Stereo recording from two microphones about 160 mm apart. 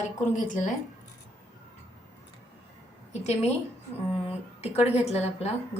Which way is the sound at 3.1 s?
45° left (ahead or behind).